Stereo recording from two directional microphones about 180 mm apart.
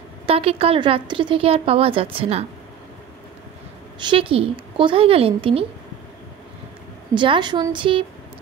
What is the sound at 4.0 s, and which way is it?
A woman's voice, 30° right (ahead or behind).